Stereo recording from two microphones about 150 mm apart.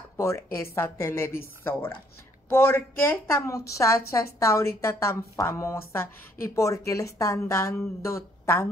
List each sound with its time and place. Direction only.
0.2 s a woman's voice: 15° left (ahead or behind)